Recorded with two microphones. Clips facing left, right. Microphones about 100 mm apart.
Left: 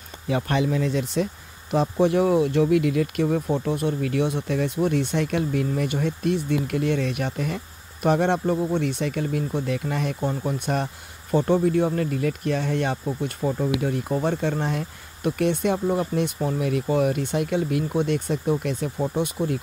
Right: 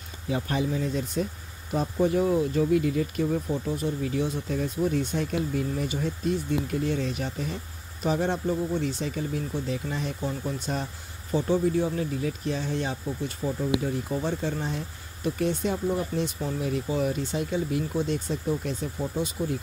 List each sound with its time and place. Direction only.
0.3 s speech: 75° left (ahead or behind); by 13.7 s 50° left (ahead or behind)
13.7 s speech: 65° left (ahead or behind)
14.0 s speech: 50° left (ahead or behind)